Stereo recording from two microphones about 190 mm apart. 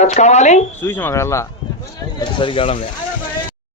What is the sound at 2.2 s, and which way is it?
Speech, 25° left (ahead or behind).